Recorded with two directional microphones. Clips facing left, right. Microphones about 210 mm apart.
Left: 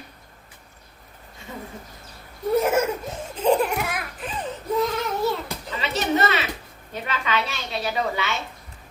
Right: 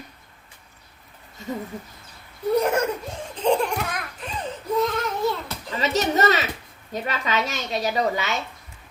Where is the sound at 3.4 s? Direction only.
5° left (ahead or behind).